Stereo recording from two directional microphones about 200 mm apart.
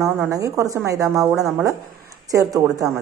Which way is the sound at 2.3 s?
15° right (ahead or behind).